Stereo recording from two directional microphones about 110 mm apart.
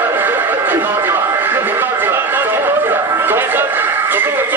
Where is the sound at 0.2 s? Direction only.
20° right (ahead or behind).